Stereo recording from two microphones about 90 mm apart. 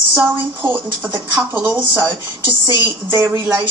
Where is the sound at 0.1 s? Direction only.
25° right (ahead or behind).